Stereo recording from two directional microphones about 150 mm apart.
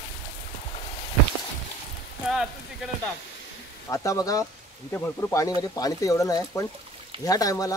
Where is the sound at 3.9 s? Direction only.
20° left (ahead or behind).